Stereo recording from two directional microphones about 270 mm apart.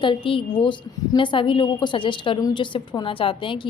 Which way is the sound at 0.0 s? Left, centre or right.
Centre.